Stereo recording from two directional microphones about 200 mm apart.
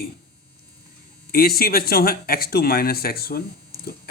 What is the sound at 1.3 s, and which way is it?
Speech, 50° left (ahead or behind).